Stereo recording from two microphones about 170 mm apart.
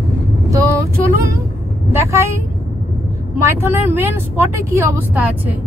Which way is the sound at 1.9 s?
15° right (ahead or behind).